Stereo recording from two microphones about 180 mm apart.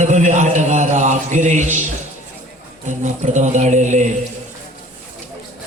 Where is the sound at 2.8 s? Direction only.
45° right (ahead or behind).